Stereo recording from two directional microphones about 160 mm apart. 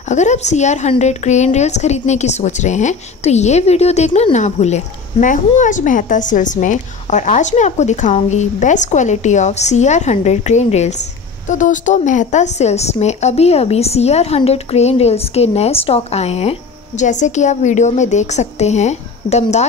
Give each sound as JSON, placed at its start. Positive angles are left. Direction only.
{"t": 0.1, "sound": "a woman's voice", "side_deg": 45}